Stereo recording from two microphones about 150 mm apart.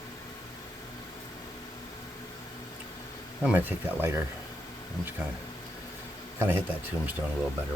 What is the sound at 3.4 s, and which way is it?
Speech, 10° right (ahead or behind).